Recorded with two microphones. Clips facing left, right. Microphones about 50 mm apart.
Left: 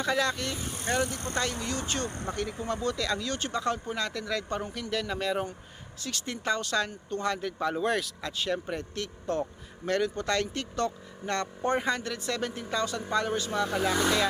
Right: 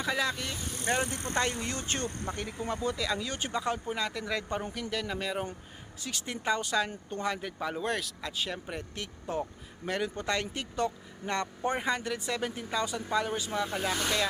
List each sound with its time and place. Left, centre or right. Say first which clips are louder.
0.0 s speech: left 3 dB; centre
0.9 s speech: left 1 dB; right
2.0 s speech: left 1 dB; left
2.3 s speech: left 3 dB; centre
4.7 s speech: left 2 dB; centre